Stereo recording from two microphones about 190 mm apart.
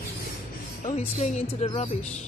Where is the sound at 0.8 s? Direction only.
35° left (ahead or behind).